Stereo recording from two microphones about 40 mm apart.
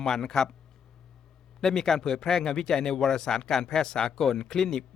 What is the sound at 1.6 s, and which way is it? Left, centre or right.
Speech, centre.